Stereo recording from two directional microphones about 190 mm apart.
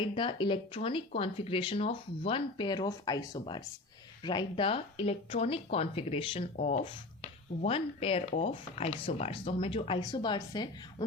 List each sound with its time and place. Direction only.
0.1 s speech: 25° left (ahead or behind)